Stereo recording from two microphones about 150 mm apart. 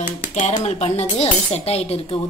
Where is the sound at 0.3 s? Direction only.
50° left (ahead or behind).